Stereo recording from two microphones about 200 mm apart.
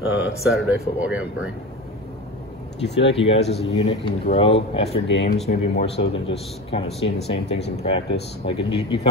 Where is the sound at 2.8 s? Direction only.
60° left (ahead or behind).